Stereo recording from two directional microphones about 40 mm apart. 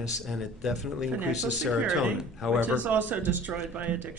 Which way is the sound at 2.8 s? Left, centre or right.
Right.